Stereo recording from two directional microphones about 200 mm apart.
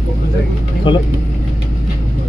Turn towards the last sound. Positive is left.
turn(degrees=25)  # may be behind; listen again after turning